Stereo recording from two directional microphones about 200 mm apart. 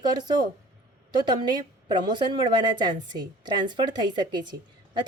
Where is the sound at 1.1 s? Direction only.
20° right (ahead or behind).